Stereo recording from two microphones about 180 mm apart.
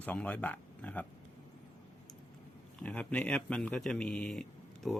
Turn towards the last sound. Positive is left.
turn(degrees=5)  # may be behind; listen again after turning